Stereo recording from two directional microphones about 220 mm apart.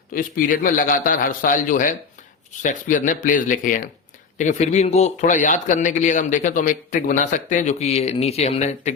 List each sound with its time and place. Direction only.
0.1 s speech: 40° left (ahead or behind)